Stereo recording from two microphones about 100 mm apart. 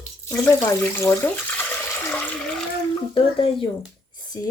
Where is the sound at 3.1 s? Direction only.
65° left (ahead or behind).